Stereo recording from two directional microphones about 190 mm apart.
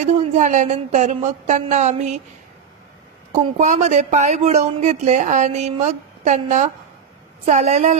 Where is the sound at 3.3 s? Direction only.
40° right (ahead or behind).